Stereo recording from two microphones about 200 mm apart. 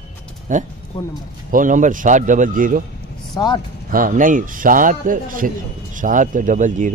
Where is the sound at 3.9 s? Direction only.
45° right (ahead or behind).